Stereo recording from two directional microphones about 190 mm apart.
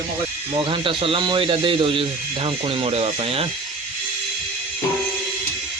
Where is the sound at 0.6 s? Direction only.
25° right (ahead or behind).